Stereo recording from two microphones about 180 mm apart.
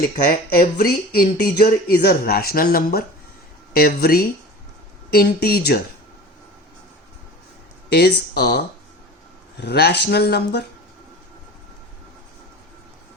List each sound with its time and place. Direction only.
0.3 s speech: 55° left (ahead or behind)
7.9 s speech: 65° left (ahead or behind)